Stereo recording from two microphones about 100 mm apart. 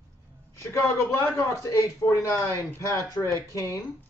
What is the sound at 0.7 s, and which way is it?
A man's voice, 30° left (ahead or behind).